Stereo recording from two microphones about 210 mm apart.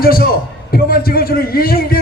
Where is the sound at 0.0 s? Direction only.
45° left (ahead or behind).